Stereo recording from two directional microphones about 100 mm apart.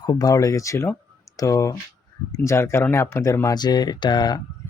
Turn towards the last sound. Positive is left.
turn(degrees=50)  # may be behind; listen again after turning